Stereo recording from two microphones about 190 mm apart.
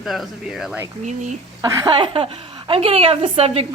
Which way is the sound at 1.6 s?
15° right (ahead or behind).